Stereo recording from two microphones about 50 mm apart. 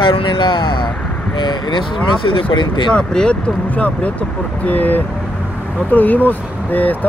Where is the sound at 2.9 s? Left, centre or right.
Centre.